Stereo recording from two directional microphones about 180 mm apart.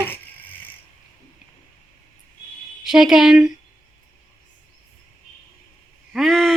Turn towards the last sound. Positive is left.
turn(degrees=0)  # may be behind; listen again after turning